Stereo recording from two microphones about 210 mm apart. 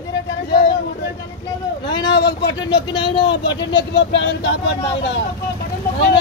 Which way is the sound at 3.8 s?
60° left (ahead or behind).